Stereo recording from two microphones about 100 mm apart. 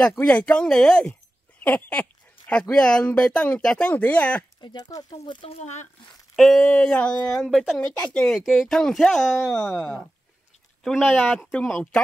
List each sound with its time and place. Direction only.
0.1 s speech: 10° left (ahead or behind)
1.6 s a sound: 15° left (ahead or behind)
2.7 s speech: 10° left (ahead or behind)
4.6 s speech: 45° left (ahead or behind)
5.2 s speech: 55° left (ahead or behind)
6.3 s speech: 5° left (ahead or behind)
7.3 s speech: centre (ahead or behind)
9.6 s speech: 10° left (ahead or behind)